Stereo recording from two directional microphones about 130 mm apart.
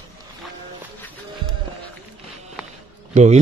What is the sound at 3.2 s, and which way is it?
Speech, 70° right (ahead or behind).